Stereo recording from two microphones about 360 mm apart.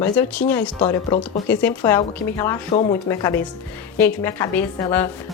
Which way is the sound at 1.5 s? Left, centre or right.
Centre.